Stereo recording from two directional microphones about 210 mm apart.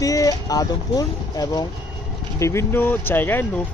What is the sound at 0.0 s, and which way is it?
Speech, 15° left (ahead or behind).